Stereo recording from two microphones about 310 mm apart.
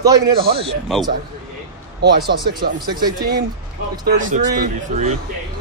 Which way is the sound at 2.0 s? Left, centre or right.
Right.